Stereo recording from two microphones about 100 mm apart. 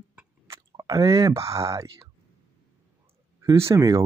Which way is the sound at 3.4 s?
30° right (ahead or behind).